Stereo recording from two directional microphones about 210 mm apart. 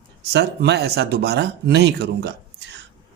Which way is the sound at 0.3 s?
50° right (ahead or behind).